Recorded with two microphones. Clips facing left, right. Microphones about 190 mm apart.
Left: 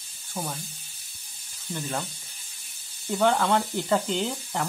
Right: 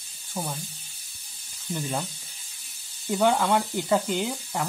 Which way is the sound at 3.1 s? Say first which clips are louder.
Even; 5° right (ahead or behind).